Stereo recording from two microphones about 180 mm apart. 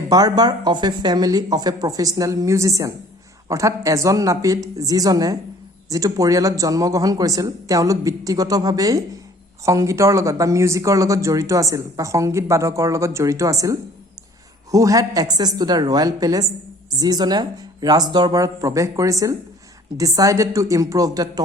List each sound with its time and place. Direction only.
0.1 s speech: 20° right (ahead or behind)